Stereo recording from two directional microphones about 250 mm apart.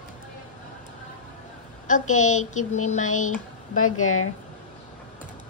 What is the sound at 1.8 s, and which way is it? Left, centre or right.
A woman's voice, left.